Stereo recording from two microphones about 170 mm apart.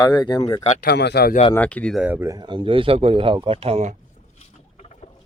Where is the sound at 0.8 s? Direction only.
75° left (ahead or behind).